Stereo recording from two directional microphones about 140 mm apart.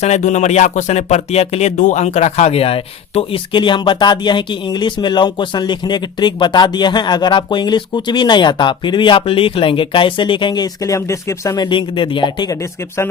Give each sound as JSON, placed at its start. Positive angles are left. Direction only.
{"t": 0.0, "sound": "speech", "side_deg": 55}